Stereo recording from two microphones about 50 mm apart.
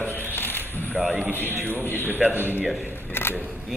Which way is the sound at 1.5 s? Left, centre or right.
Right.